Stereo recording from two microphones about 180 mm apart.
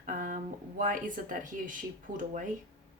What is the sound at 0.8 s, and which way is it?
A woman's voice, 45° right (ahead or behind).